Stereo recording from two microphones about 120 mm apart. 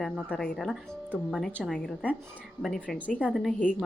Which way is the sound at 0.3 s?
10° left (ahead or behind).